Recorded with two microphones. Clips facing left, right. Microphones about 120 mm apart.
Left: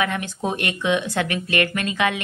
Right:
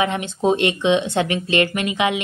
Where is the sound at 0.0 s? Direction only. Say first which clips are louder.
Right 4 dB; 20° right (ahead or behind).